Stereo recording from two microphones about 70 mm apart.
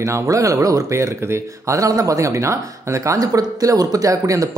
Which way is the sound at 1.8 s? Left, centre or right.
Right.